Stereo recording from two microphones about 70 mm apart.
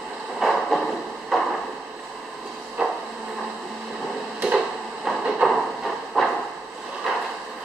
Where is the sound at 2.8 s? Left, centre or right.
Centre.